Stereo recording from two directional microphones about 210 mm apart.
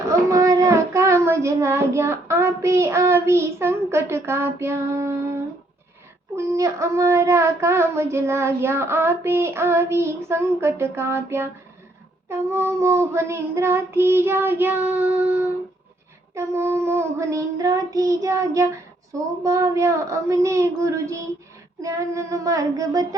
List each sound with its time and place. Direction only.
0.1 s child singing: 15° right (ahead or behind)
6.3 s child singing: 15° right (ahead or behind)